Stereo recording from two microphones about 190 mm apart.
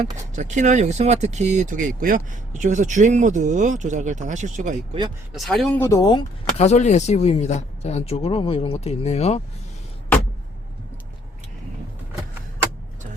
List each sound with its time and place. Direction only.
0.3 s speech: 40° right (ahead or behind)
5.3 s speech: centre (ahead or behind)
5.8 s speech: 20° left (ahead or behind)
6.6 s speech: 35° left (ahead or behind)